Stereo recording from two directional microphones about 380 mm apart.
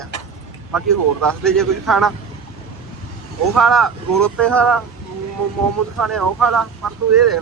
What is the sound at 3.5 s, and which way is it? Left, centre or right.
Speech, centre.